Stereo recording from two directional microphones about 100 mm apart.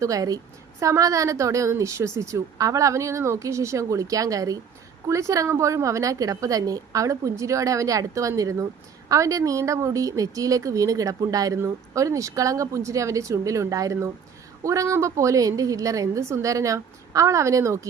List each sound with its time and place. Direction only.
0.0 s a woman's voice: 35° right (ahead or behind)